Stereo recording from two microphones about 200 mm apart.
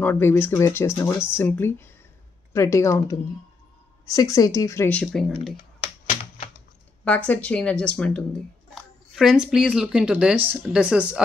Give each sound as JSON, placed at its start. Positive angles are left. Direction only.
{"t": 0.0, "sound": "speech", "side_deg": 10}
{"t": 7.1, "sound": "speech", "side_deg": 5}